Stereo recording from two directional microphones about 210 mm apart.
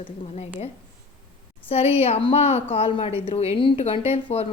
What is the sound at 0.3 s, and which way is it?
Speech, 30° left (ahead or behind).